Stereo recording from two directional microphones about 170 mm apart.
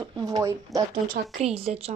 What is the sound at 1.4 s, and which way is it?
Speech, 35° right (ahead or behind).